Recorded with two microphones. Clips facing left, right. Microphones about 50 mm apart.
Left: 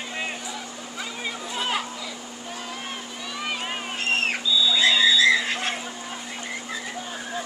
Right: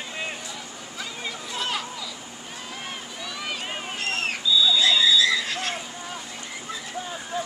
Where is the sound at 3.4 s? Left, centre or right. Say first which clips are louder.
Left 3 dB; centre.